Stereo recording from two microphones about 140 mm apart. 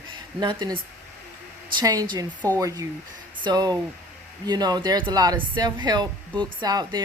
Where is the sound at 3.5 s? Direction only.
30° right (ahead or behind).